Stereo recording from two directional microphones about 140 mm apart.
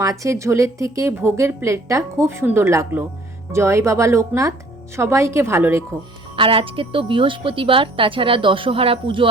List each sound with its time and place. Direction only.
0.0 s a woman's voice: 25° right (ahead or behind)
6.3 s a woman's voice: 40° right (ahead or behind)